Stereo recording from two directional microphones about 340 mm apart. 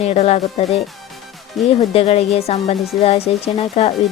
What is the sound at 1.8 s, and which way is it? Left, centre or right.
Speech, centre.